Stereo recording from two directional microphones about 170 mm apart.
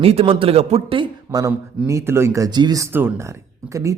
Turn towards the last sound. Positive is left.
turn(degrees=-20)  # may be behind; listen again after turning